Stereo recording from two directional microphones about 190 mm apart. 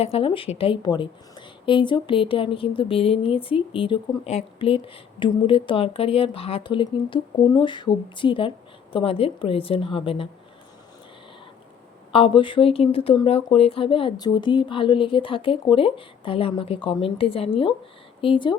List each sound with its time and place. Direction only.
0.0 s a woman's voice: 30° left (ahead or behind)
12.1 s a woman's voice: 25° left (ahead or behind)